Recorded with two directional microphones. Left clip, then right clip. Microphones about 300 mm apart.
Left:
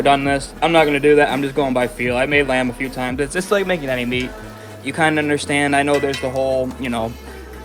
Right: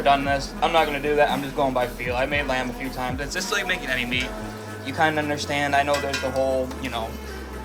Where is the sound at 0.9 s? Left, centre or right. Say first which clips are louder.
Left 7 dB; left.